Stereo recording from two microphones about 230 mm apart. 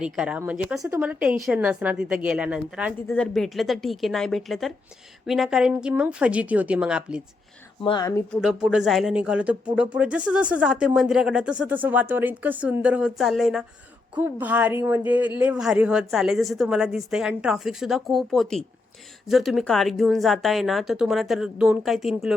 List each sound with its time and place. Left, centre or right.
0.0 s speech: centre
7.9 s speech: centre
8.3 s speech: centre